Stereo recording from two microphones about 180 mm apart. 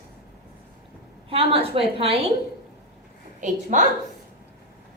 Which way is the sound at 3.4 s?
45° right (ahead or behind).